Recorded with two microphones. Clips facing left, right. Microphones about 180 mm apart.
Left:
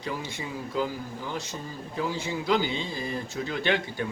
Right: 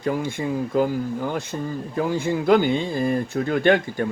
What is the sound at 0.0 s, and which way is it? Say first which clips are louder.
Speech: right 10 dB; 50° right (ahead or behind).